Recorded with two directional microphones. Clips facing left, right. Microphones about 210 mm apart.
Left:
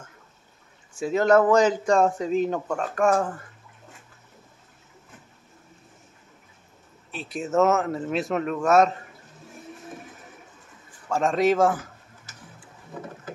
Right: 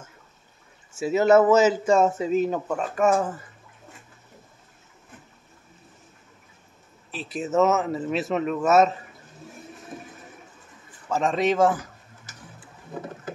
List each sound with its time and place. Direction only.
0.9 s a man's voice: 5° right (ahead or behind)
7.1 s a man's voice: centre (ahead or behind)
11.1 s a man's voice: centre (ahead or behind)